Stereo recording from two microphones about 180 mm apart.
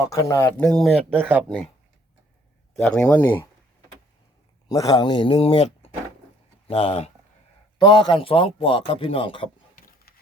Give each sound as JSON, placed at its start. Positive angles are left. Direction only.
{"t": 0.0, "sound": "speech", "side_deg": 20}
{"t": 0.6, "sound": "speech", "side_deg": 0}
{"t": 2.7, "sound": "speech", "side_deg": 5}
{"t": 4.7, "sound": "speech", "side_deg": 20}
{"t": 6.7, "sound": "speech", "side_deg": 30}
{"t": 9.7, "sound": "vehicle", "side_deg": 55}